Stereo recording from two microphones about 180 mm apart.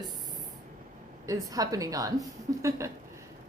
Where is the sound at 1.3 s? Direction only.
20° right (ahead or behind).